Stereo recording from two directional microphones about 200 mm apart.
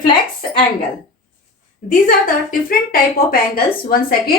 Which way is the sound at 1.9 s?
40° left (ahead or behind).